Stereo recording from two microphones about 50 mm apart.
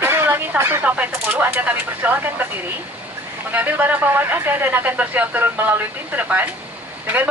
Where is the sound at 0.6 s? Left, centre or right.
Right.